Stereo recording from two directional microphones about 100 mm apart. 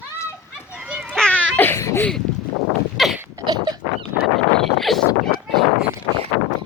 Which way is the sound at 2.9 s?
Centre (ahead or behind).